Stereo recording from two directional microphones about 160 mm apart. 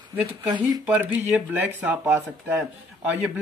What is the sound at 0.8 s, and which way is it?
Speech, 10° right (ahead or behind).